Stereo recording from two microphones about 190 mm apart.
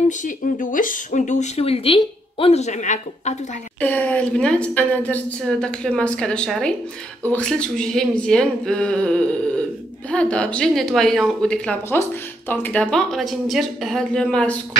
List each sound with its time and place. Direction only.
0.2 s speech: 45° left (ahead or behind)
3.8 s speech: 10° left (ahead or behind)